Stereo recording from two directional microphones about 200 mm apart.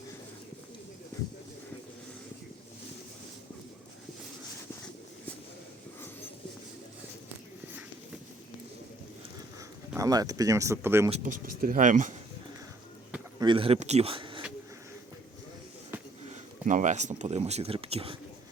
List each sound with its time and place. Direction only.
9.9 s speech: 15° right (ahead or behind)
11.1 s speech: 40° right (ahead or behind)
13.4 s speech: 25° right (ahead or behind)
16.3 s speech: 40° right (ahead or behind)